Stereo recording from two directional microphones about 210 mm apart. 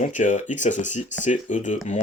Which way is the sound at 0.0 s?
35° left (ahead or behind).